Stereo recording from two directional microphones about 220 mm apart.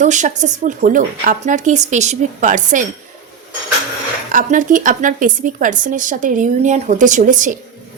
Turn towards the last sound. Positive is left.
turn(degrees=-35)  # may be behind; listen again after turning